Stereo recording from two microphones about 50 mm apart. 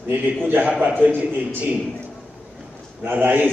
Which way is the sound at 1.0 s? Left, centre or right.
Right.